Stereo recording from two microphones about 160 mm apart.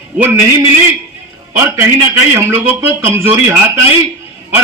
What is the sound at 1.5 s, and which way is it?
A man's voice, 15° right (ahead or behind).